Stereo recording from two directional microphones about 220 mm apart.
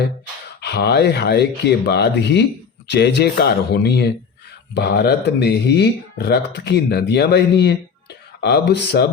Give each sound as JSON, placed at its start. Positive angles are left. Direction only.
{"t": 0.6, "sound": "speech", "side_deg": 50}